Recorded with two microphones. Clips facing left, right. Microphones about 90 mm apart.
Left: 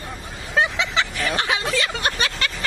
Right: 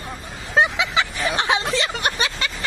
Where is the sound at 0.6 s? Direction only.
15° right (ahead or behind).